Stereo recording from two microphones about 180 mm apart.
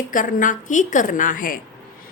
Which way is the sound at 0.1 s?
50° left (ahead or behind).